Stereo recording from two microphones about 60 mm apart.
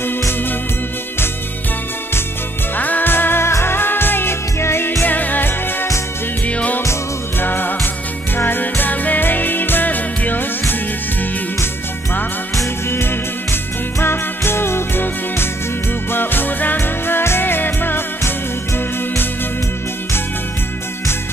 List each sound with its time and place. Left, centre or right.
2.8 s music: left
12.9 s music: left